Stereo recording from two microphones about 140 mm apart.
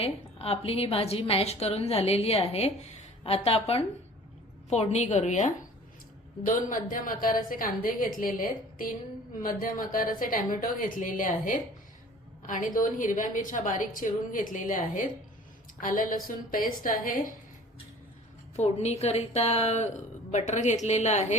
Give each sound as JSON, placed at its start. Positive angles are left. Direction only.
{"t": 0.0, "sound": "a woman's voice", "side_deg": 45}
{"t": 18.5, "sound": "a woman's voice", "side_deg": 50}